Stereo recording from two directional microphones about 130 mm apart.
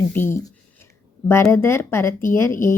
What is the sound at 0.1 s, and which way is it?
A woman's voice, 20° left (ahead or behind).